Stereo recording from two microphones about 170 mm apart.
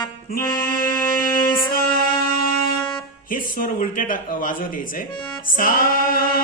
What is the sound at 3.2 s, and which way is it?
Speech, 55° left (ahead or behind).